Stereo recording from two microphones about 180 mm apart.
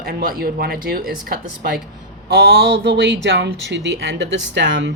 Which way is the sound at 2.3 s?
65° right (ahead or behind).